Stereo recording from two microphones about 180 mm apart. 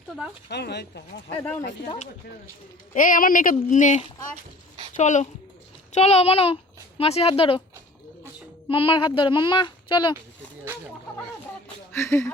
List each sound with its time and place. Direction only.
0.4 s speech: 70° left (ahead or behind)
1.4 s speech: 10° left (ahead or behind)
2.9 s a child's voice: 45° left (ahead or behind); by 7.6 s 30° left (ahead or behind)
8.7 s a child's voice: 30° left (ahead or behind)
11.9 s speech: 15° left (ahead or behind)